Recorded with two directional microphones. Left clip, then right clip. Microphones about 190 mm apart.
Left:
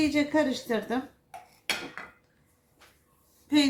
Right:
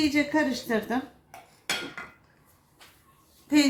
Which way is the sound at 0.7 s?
15° right (ahead or behind).